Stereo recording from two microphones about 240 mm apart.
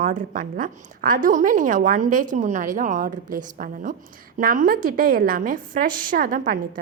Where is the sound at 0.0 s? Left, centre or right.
Right.